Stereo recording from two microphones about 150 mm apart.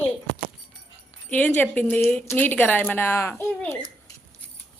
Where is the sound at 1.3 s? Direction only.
10° left (ahead or behind).